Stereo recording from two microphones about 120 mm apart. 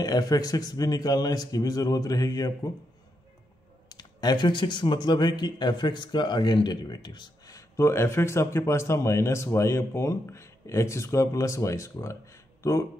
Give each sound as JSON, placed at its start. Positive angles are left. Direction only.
{"t": 0.0, "sound": "a man's voice", "side_deg": 30}
{"t": 3.9, "sound": "speech", "side_deg": 35}